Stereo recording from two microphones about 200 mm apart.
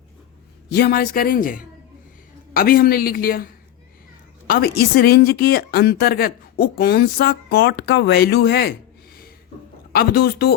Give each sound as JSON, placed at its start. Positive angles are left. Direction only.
{"t": 0.7, "sound": "speech", "side_deg": 55}
{"t": 9.9, "sound": "speech", "side_deg": 50}